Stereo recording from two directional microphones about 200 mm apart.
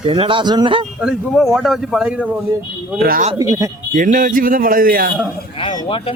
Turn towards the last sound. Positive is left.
turn(degrees=25)  # may be behind; listen again after turning